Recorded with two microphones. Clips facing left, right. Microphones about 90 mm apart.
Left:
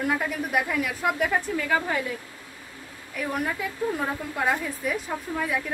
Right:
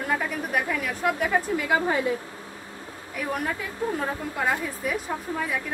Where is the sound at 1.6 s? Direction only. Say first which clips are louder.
Right 2 dB; 15° right (ahead or behind).